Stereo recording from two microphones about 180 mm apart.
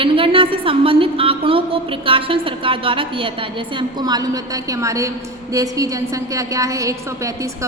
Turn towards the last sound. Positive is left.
turn(degrees=-15)  # may be behind; listen again after turning